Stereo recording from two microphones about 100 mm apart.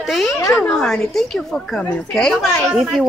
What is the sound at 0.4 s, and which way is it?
Speech, 30° left (ahead or behind).